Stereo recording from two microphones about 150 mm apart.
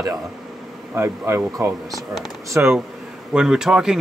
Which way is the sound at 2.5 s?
15° right (ahead or behind).